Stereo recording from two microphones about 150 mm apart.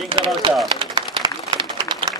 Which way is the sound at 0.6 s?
35° right (ahead or behind).